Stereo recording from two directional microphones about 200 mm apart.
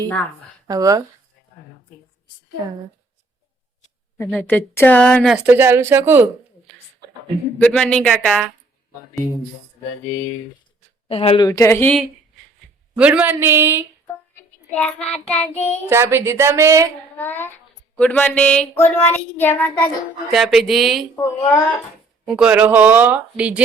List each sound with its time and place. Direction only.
0.7 s speech: 15° right (ahead or behind)
4.3 s speech: 5° left (ahead or behind); by 6.2 s 10° right (ahead or behind)
7.6 s speech: 5° left (ahead or behind)
11.1 s a woman's voice: 30° left (ahead or behind)
11.4 s child singing: 15° left (ahead or behind)
13.0 s speech: 5° right (ahead or behind)
14.8 s speech: 5° left (ahead or behind)
15.1 s child singing: 5° left (ahead or behind)
15.9 s speech: 10° right (ahead or behind)
17.2 s child singing: 10° left (ahead or behind)
20.3 s speech: centre (ahead or behind)
21.2 s child singing: 15° left (ahead or behind)
22.3 s speech: 5° right (ahead or behind)